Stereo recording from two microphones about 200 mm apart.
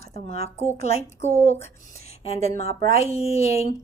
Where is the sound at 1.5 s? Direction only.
15° left (ahead or behind).